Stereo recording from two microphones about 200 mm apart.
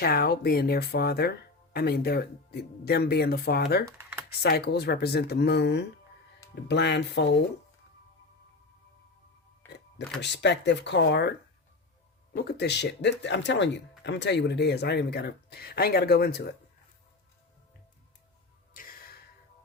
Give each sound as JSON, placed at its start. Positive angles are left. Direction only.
{"t": 0.0, "sound": "speech", "side_deg": 50}
{"t": 3.8, "sound": "speech", "side_deg": -10}
{"t": 4.3, "sound": "speech", "side_deg": 55}
{"t": 9.6, "sound": "music", "side_deg": 10}
{"t": 10.2, "sound": "speech", "side_deg": 60}
{"t": 18.7, "sound": "music", "side_deg": 45}